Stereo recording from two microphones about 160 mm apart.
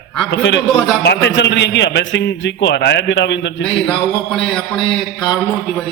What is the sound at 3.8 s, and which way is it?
Speech, 5° left (ahead or behind).